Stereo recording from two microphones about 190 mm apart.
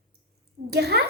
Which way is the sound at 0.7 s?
55° right (ahead or behind).